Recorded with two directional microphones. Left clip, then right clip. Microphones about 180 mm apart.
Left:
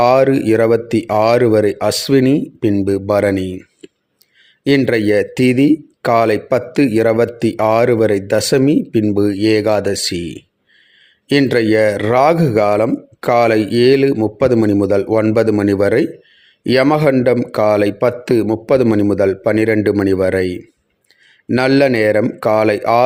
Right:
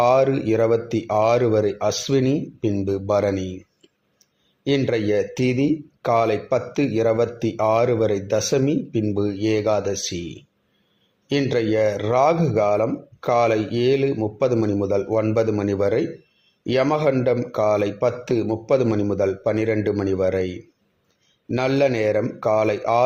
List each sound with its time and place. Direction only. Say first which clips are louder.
0.0 s speech: left 6 dB; 35° left (ahead or behind)
4.6 s speech: left 7 dB; 35° left (ahead or behind)